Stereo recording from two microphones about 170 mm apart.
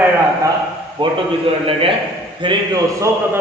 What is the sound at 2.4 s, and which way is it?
Speech, 30° right (ahead or behind).